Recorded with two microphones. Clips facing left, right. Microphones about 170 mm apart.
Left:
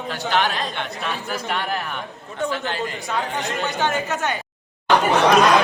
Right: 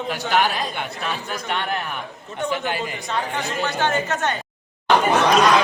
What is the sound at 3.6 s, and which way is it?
Speech, 15° left (ahead or behind).